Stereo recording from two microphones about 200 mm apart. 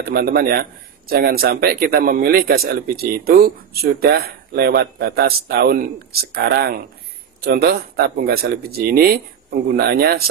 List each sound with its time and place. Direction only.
0.0 s a man's voice: 50° right (ahead or behind)